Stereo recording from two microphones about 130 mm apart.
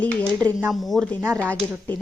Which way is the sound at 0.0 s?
10° left (ahead or behind).